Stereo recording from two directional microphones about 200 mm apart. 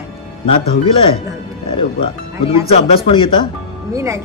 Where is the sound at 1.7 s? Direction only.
25° left (ahead or behind).